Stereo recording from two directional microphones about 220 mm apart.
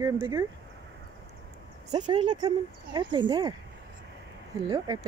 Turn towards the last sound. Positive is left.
turn(degrees=-15)  # may be behind; listen again after turning